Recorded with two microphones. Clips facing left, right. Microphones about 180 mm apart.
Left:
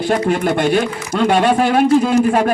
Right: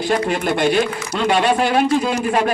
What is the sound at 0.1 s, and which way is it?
Speech, 50° left (ahead or behind).